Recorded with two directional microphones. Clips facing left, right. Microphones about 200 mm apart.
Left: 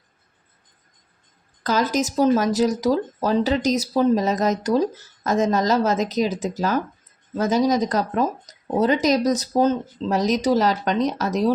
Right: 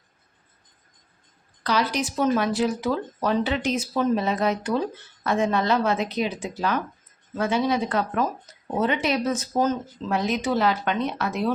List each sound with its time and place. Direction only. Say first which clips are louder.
1.6 s speech: left 3 dB; 45° left (ahead or behind)